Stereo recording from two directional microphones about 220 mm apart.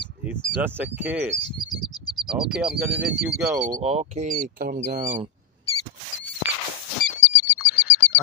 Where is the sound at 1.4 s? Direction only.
20° left (ahead or behind).